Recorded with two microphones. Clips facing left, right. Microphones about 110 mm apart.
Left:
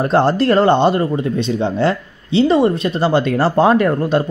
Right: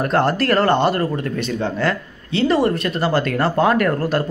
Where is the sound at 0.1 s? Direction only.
25° left (ahead or behind).